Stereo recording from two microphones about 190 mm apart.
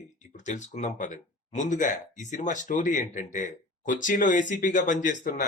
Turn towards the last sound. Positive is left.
turn(degrees=40)  # may be behind; listen again after turning